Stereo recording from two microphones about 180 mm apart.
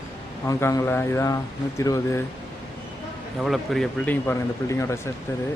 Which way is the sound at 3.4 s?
Centre (ahead or behind).